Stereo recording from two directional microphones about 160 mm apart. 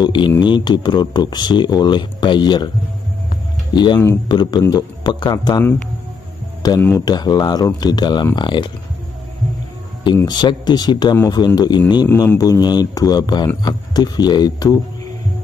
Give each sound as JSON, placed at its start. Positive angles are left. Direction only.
{"t": 0.0, "sound": "speech", "side_deg": 30}
{"t": 3.7, "sound": "speech", "side_deg": 30}
{"t": 4.0, "sound": "speech", "side_deg": 15}
{"t": 10.2, "sound": "speech", "side_deg": 25}